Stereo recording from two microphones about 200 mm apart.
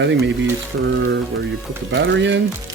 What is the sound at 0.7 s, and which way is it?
Speech, 80° right.